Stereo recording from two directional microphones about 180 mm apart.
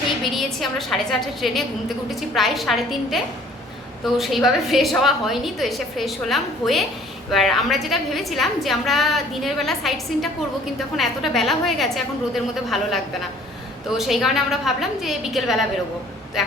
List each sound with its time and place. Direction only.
0.3 s a woman's voice: centre (ahead or behind)